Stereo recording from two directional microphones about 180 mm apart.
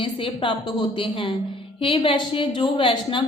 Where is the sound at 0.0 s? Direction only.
30° left (ahead or behind).